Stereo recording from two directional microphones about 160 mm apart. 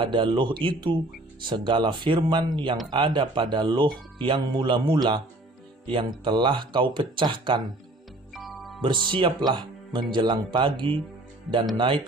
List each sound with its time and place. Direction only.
0.0 s speech: 30° right (ahead or behind)
8.3 s music: centre (ahead or behind)
8.8 s speech: 30° right (ahead or behind)